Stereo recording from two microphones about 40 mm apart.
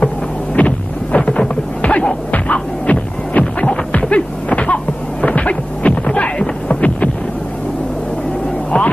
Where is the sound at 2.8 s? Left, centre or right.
Left.